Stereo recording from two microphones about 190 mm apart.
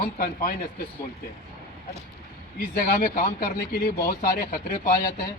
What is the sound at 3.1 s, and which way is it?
Speech, 50° left (ahead or behind).